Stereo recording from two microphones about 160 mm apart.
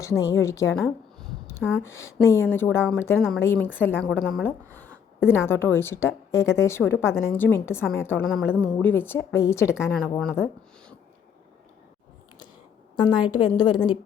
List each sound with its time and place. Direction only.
0.0 s a woman's voice: 20° left (ahead or behind)
13.0 s a woman's voice: 25° left (ahead or behind)